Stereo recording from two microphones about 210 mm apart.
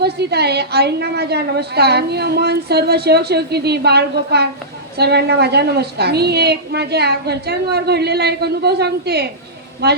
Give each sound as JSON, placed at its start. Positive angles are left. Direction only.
{"t": 0.0, "sound": "a woman's voice", "side_deg": -50}